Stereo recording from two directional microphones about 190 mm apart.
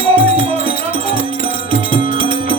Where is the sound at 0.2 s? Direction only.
30° right (ahead or behind).